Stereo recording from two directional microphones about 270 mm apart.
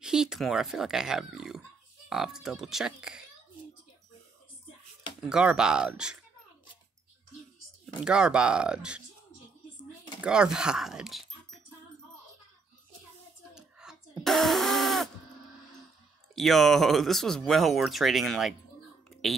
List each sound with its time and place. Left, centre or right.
0.0 s speech: centre
5.3 s speech: centre
7.8 s speech: centre
10.2 s speech: centre
13.6 s a sound: centre
16.3 s speech: centre